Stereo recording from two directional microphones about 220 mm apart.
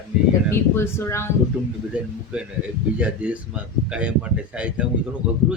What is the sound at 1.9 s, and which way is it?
A man's voice, 5° right (ahead or behind).